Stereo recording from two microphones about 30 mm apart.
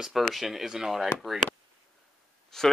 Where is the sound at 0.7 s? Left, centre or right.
Centre.